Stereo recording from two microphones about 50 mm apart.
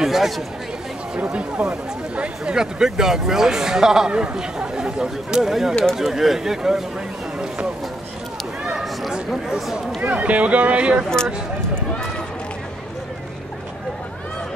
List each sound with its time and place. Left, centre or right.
0.0 s chatter: centre
1.3 s speech: right
8.7 s a sound: centre
9.1 s speech: centre
10.0 s speech: right